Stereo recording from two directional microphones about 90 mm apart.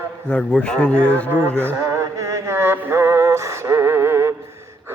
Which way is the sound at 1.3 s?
25° right (ahead or behind).